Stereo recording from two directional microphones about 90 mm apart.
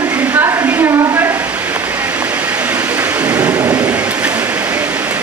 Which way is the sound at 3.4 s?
15° right (ahead or behind).